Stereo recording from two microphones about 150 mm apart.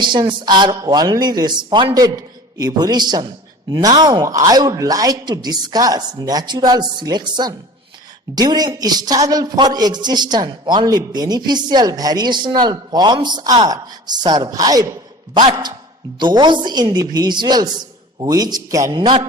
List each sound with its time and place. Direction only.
0.0 s a man's voice: 30° right (ahead or behind)